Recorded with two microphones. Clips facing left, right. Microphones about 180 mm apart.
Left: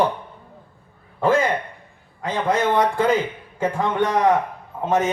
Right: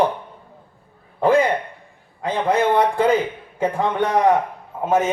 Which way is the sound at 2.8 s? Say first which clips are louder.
Right 2 dB; 15° right (ahead or behind).